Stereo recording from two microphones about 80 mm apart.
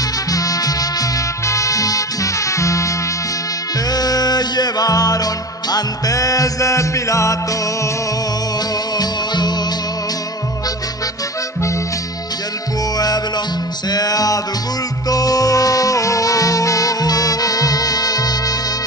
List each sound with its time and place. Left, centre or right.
0.3 s music: left
3.9 s music: left
8.9 s music: left
12.9 s music: left